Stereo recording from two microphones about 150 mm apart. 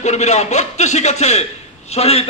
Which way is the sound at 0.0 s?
50° left (ahead or behind).